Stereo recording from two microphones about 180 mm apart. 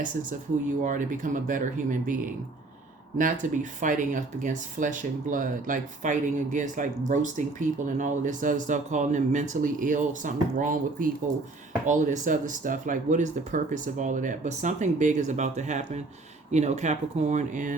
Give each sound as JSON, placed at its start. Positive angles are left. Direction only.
{"t": 0.8, "sound": "speech", "side_deg": -45}
{"t": 3.2, "sound": "speech", "side_deg": -45}